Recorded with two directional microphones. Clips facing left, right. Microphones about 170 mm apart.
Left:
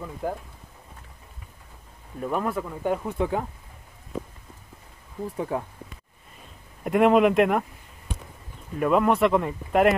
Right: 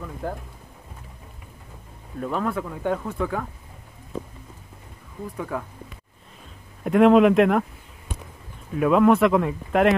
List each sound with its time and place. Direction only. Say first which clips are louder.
0.0 s speech: left 1 dB; 10° left (ahead or behind)
2.1 s speech: right 1 dB; 10° left (ahead or behind)
5.4 s speech: left 2 dB; 30° left (ahead or behind)
6.8 s speech: right 3 dB; 5° left (ahead or behind)
8.7 s speech: right 4 dB; centre (ahead or behind)